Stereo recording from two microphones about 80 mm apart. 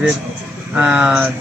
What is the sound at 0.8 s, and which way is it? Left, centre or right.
Speech, centre.